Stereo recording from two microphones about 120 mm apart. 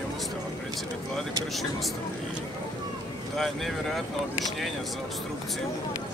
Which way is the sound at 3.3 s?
Centre (ahead or behind).